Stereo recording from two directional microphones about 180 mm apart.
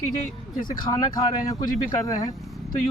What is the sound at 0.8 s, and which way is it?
Speech, 20° left (ahead or behind).